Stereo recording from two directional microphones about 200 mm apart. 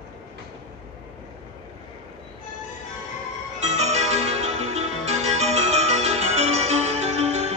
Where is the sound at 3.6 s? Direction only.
35° right (ahead or behind).